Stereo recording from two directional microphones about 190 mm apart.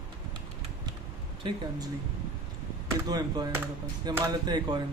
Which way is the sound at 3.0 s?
20° right (ahead or behind).